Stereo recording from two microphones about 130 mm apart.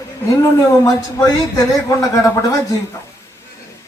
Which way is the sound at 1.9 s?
25° left (ahead or behind).